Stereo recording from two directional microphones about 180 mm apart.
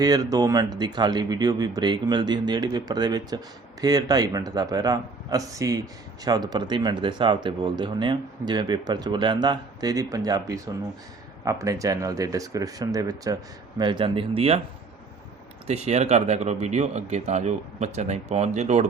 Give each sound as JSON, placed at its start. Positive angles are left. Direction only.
{"t": 0.0, "sound": "speech", "side_deg": -20}
{"t": 15.6, "sound": "speech", "side_deg": -40}